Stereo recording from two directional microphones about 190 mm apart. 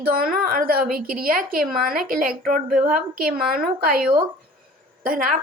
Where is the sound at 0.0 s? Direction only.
50° right (ahead or behind).